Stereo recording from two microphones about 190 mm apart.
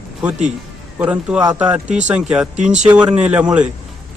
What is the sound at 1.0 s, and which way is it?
Speech, 5° right (ahead or behind).